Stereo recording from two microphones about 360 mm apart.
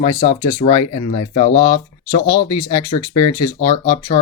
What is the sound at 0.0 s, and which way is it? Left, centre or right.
Speech, centre.